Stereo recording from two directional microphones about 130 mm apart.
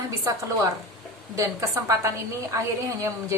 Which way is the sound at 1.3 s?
25° right (ahead or behind).